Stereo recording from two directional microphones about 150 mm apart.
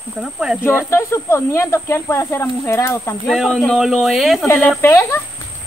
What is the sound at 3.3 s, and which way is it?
Speech, 5° left (ahead or behind).